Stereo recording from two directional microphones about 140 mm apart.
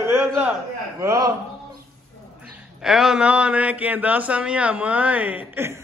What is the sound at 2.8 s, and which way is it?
A man's voice, 5° right (ahead or behind).